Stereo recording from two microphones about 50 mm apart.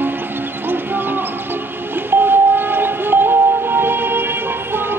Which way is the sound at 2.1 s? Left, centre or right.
Right.